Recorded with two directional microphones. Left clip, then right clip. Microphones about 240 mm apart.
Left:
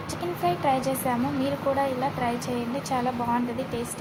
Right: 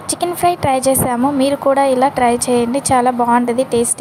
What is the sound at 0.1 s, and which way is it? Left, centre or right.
Speech, right.